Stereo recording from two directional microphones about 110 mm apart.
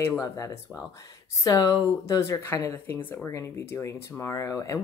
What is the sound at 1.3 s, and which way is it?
Speech, 35° left (ahead or behind).